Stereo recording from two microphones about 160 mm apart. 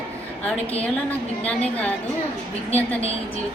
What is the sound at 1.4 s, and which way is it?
Speech, 10° left (ahead or behind).